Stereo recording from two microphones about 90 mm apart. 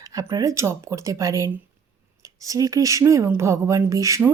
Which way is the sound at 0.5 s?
30° right (ahead or behind).